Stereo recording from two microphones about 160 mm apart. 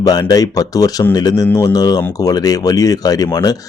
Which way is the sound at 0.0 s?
25° left (ahead or behind).